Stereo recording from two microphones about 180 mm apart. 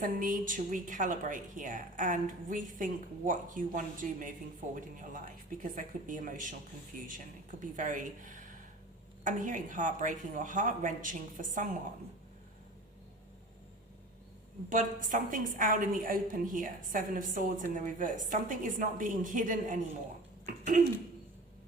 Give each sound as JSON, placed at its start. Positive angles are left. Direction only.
{"t": 0.0, "sound": "a woman's voice", "side_deg": -50}
{"t": 14.7, "sound": "a woman's voice", "side_deg": -45}
{"t": 20.4, "sound": "a sound", "side_deg": -45}